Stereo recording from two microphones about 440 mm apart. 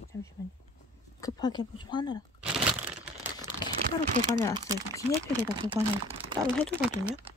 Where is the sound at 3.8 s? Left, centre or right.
Centre.